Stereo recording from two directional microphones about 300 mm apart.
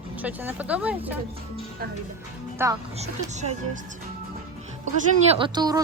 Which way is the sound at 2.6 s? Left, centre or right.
Centre.